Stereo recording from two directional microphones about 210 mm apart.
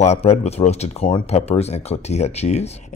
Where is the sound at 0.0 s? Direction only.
30° left (ahead or behind).